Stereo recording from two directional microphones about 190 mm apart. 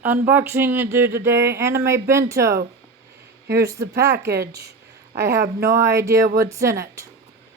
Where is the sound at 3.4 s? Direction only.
60° right (ahead or behind).